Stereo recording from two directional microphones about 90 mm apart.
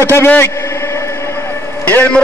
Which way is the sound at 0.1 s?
25° left (ahead or behind).